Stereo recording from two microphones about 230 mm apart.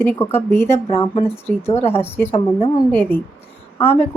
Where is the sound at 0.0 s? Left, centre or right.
Centre.